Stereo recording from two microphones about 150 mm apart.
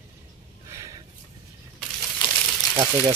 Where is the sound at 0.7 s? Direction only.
20° right (ahead or behind).